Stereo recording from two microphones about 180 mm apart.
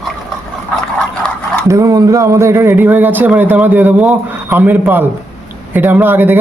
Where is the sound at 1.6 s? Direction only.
20° right (ahead or behind).